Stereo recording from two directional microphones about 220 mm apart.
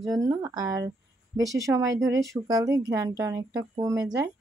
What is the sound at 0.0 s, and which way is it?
Speech, 15° right (ahead or behind).